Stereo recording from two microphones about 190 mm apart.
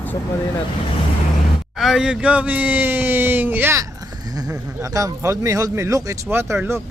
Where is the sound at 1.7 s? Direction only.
Centre (ahead or behind).